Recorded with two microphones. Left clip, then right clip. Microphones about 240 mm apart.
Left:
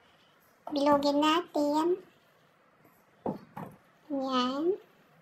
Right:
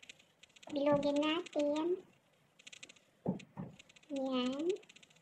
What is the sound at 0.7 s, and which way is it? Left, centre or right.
Speech, left.